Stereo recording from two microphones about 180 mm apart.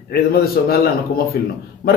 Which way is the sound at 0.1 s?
60° left (ahead or behind).